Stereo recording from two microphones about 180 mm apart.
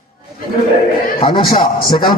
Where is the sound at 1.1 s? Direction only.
30° left (ahead or behind).